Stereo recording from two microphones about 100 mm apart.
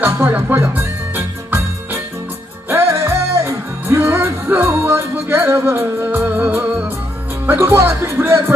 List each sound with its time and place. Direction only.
0.0 s music: 20° right (ahead or behind)
7.4 s speech: 25° right (ahead or behind)